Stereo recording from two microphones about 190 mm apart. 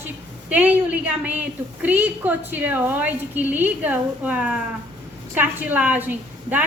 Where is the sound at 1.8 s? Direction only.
10° right (ahead or behind).